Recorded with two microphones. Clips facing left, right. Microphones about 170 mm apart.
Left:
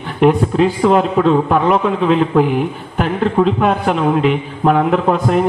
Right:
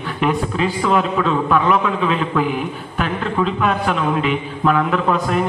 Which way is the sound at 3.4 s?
50° left (ahead or behind).